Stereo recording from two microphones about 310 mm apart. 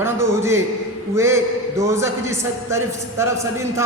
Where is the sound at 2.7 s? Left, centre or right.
Centre.